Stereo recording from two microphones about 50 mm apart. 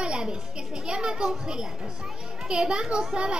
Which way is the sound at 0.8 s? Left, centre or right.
Centre.